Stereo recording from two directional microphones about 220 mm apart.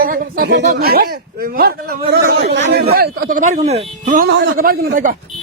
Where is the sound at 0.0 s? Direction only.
40° right (ahead or behind).